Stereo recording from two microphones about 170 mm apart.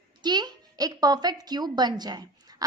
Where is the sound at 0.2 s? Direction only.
25° right (ahead or behind).